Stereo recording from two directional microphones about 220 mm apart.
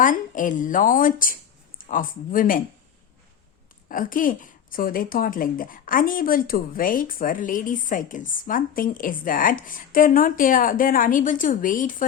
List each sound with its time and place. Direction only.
0.0 s a woman's voice: 35° left (ahead or behind)
3.8 s a woman's voice: 40° left (ahead or behind)